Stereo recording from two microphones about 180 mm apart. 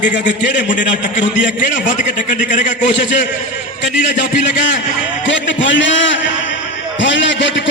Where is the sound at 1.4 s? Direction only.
45° left (ahead or behind).